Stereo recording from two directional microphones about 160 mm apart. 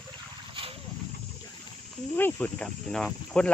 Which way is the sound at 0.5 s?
35° right (ahead or behind).